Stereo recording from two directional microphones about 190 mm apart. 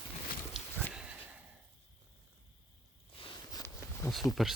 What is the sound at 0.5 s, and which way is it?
Horse, 5° right (ahead or behind).